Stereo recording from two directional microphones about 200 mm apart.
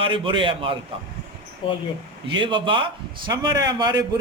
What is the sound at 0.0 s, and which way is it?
Speech, 25° right (ahead or behind).